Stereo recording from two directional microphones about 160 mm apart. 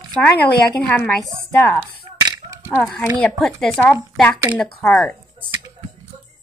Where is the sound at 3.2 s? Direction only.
5° left (ahead or behind).